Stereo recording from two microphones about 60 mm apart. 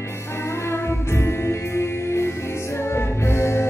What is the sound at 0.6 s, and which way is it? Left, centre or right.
Music, left.